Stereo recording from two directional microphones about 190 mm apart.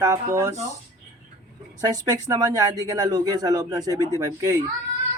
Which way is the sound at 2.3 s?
20° right (ahead or behind).